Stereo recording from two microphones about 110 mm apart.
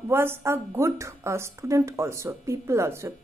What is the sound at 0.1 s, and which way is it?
A woman's voice, 20° right (ahead or behind).